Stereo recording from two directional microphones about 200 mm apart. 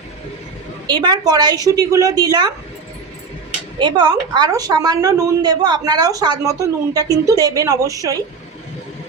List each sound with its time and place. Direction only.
0.9 s a woman's voice: 20° right (ahead or behind)
3.8 s a woman's voice: 20° right (ahead or behind)